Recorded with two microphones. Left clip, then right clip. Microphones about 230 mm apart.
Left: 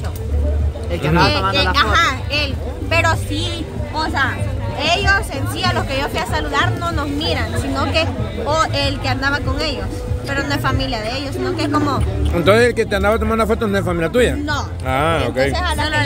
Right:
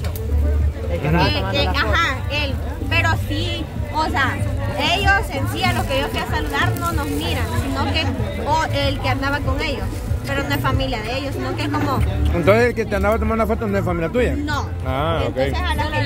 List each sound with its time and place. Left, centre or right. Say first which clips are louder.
1.0 s a man's voice: left 5 dB; centre